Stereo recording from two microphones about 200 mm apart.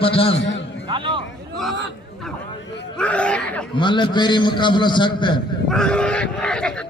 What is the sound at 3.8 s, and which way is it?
A man's voice, 25° left (ahead or behind).